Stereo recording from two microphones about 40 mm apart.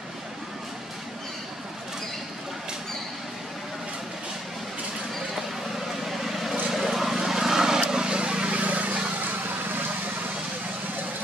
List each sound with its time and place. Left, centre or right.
6.0 s vehicle: centre; by 8.5 s right
8.5 s a sound: right
9.2 s vehicle: right